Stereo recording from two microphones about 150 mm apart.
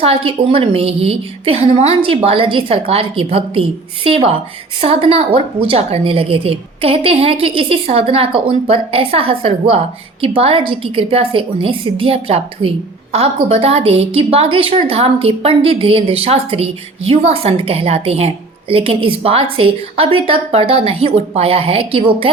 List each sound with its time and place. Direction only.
0.0 s a woman's voice: 40° right (ahead or behind)